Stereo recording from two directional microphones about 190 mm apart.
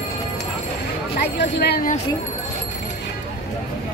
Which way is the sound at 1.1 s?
60° left (ahead or behind).